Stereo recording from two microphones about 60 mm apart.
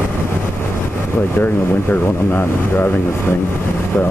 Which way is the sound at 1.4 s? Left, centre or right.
Left.